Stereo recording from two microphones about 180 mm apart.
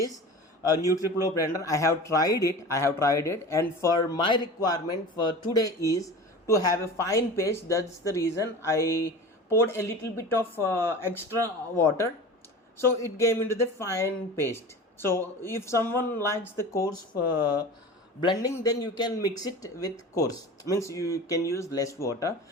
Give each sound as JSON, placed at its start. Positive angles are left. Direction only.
{"t": 0.6, "sound": "a man's voice", "side_deg": 20}
{"t": 13.1, "sound": "a man's voice", "side_deg": 15}